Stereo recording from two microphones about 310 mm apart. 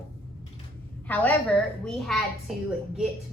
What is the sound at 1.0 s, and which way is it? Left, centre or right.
A woman's voice, centre.